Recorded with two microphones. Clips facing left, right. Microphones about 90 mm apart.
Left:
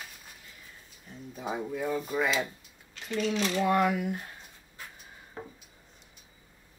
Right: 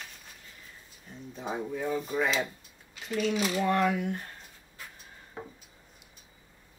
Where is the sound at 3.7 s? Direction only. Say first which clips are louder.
Left 1 dB; 5° left (ahead or behind).